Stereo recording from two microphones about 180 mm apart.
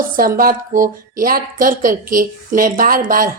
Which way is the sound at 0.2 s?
50° right (ahead or behind).